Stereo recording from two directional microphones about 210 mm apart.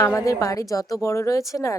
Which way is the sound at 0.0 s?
15° left (ahead or behind).